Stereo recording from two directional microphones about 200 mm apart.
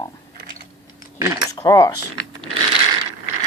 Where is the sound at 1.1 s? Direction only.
15° right (ahead or behind).